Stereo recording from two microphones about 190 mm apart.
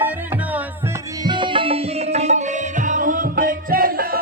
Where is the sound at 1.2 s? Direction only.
25° right (ahead or behind).